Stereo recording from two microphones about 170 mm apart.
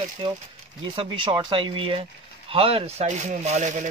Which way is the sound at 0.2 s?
30° right (ahead or behind).